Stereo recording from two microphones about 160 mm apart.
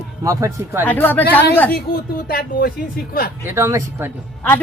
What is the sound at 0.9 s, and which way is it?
Speech, 10° left (ahead or behind).